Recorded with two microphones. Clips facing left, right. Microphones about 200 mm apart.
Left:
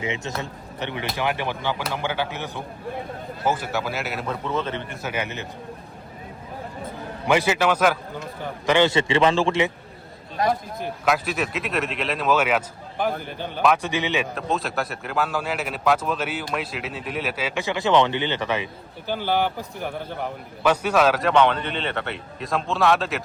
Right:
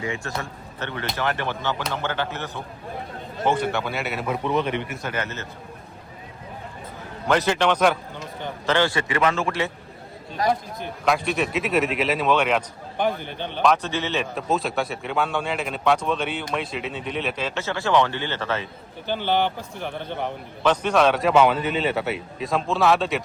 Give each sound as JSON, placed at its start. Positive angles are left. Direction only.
{"t": 0.0, "sound": "a man's voice", "side_deg": 20}
{"t": 4.3, "sound": "a man's voice", "side_deg": -15}
{"t": 5.0, "sound": "speech", "side_deg": 10}
{"t": 7.3, "sound": "speech", "side_deg": 10}
{"t": 8.6, "sound": "a man's voice", "side_deg": 15}
{"t": 11.0, "sound": "speech", "side_deg": 0}
{"t": 14.3, "sound": "speech", "side_deg": 0}